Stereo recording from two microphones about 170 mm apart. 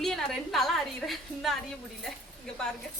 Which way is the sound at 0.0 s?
Centre (ahead or behind).